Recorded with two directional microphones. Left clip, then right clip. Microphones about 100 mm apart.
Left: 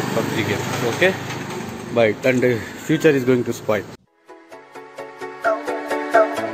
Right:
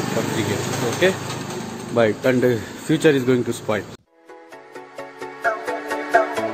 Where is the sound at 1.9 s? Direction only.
25° right (ahead or behind).